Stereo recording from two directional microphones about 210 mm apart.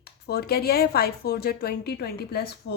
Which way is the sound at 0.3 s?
50° left (ahead or behind).